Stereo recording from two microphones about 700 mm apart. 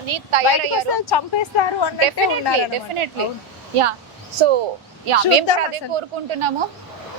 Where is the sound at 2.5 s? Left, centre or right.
Right.